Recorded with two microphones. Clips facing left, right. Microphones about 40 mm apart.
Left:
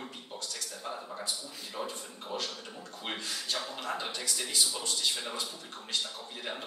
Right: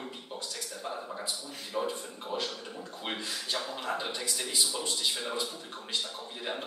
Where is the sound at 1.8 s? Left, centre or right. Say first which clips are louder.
Right 6 dB; centre.